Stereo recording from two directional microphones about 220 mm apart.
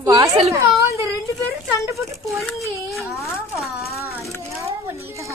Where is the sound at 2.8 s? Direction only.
Centre (ahead or behind).